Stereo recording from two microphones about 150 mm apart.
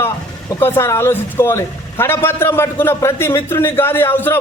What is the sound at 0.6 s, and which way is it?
A man's voice, 15° left (ahead or behind).